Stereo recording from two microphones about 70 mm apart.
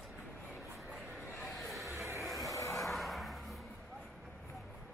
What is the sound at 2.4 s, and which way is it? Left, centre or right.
Vehicle, left.